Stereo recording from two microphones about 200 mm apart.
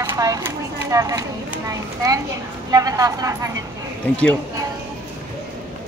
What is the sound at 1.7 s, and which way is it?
A woman's voice, 15° right (ahead or behind).